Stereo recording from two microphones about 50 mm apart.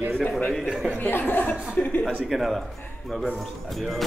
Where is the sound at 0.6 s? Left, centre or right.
Centre.